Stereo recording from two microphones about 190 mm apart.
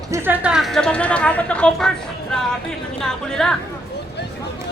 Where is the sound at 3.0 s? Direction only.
5° left (ahead or behind).